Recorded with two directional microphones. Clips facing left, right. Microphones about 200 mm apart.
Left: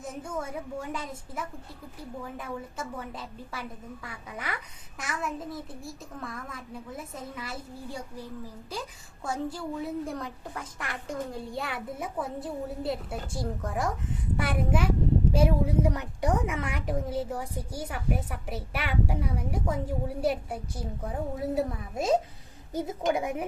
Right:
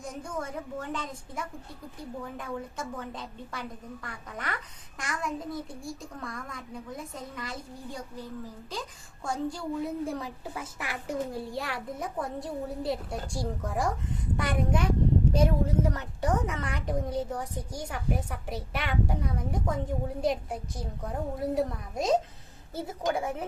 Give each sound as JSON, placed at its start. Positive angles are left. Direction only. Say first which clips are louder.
{"t": 0.0, "sound": "a child's voice", "louder": "left 1 dB", "side_deg": 5}
{"t": 22.7, "sound": "a child's voice", "louder": "left 3 dB", "side_deg": 20}